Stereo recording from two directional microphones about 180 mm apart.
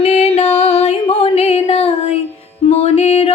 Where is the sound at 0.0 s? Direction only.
35° left (ahead or behind).